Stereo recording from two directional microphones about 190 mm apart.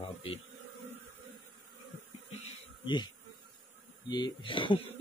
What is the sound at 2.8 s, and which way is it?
Bee, 25° left (ahead or behind).